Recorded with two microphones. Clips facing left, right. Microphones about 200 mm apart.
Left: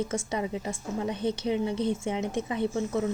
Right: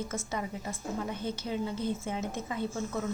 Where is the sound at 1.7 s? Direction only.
80° left.